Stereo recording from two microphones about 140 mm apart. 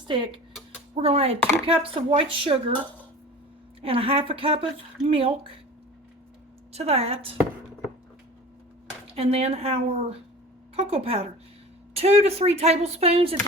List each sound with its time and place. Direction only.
0.1 s a woman's voice: 35° right (ahead or behind)
3.8 s speech: 40° right (ahead or behind)
6.7 s a woman's voice: 50° right (ahead or behind)
9.1 s a woman's voice: 45° right (ahead or behind)